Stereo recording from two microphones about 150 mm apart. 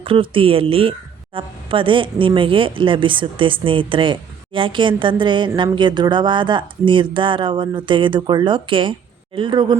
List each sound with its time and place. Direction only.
0.0 s a woman's voice: 35° right (ahead or behind)